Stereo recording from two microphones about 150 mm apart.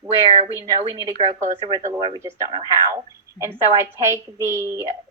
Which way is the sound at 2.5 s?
20° right (ahead or behind).